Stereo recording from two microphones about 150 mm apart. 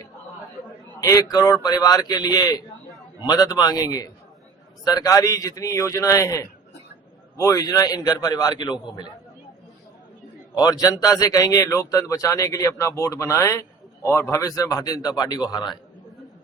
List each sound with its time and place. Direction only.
1.0 s speech: 25° left (ahead or behind)
10.6 s speech: 25° left (ahead or behind)